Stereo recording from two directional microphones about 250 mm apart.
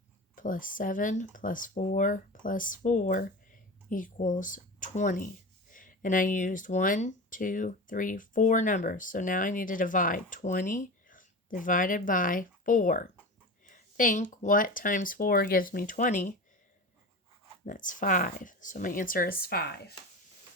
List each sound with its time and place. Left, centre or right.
0.3 s speech: left
17.7 s speech: left